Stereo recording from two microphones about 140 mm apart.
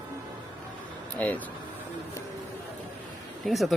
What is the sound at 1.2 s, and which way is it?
Speech, 10° left (ahead or behind).